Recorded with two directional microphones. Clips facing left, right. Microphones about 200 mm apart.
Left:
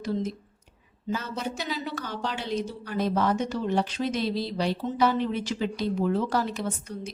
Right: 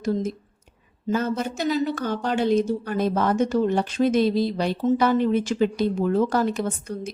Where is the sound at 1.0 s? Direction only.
50° right (ahead or behind).